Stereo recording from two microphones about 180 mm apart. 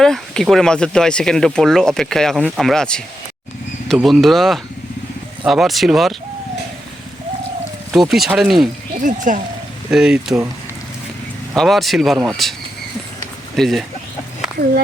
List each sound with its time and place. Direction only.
0.0 s speech: centre (ahead or behind)
7.9 s speech: centre (ahead or behind)
9.0 s speech: 45° right (ahead or behind)
9.9 s speech: 5° right (ahead or behind)
11.5 s speech: centre (ahead or behind)
13.6 s speech: centre (ahead or behind)